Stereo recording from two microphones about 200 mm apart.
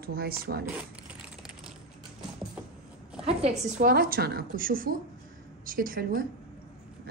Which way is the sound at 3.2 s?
35° right (ahead or behind).